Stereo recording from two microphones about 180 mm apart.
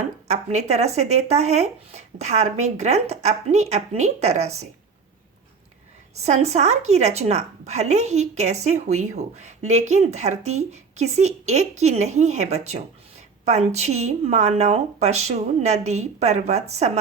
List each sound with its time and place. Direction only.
0.3 s a woman's voice: 40° right (ahead or behind)
6.1 s a woman's voice: 35° right (ahead or behind)